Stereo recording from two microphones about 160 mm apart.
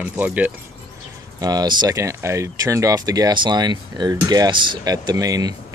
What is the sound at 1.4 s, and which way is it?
Speech, 25° right (ahead or behind).